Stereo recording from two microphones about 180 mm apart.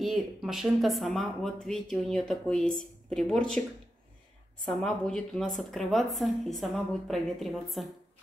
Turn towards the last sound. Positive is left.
turn(degrees=0)  # may be behind; listen again after turning